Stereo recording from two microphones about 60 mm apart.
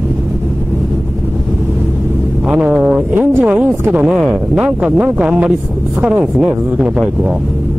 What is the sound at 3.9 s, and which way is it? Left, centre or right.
Speech, centre.